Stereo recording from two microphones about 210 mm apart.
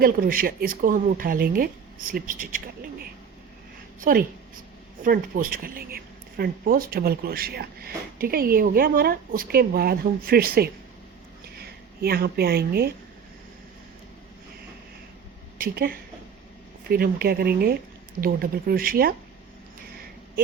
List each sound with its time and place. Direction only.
0.0 s speech: 45° right (ahead or behind)
4.0 s a woman's voice: 40° right (ahead or behind)
15.5 s speech: 45° right (ahead or behind)